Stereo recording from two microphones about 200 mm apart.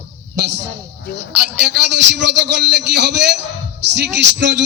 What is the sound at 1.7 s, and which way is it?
A man's voice, 60° right (ahead or behind).